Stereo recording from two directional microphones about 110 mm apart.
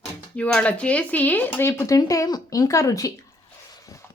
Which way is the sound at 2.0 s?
35° left (ahead or behind).